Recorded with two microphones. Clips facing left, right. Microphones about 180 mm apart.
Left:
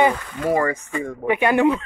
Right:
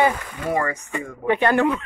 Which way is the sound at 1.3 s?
10° left (ahead or behind).